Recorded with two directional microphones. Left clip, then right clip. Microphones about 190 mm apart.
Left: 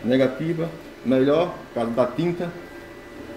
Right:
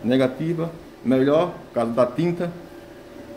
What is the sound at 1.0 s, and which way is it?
Speech, 40° right (ahead or behind).